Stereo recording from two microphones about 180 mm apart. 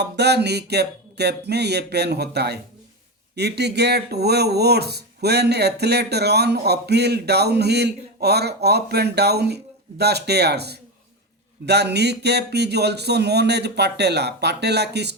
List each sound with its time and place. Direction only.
0.0 s speech: 65° right (ahead or behind)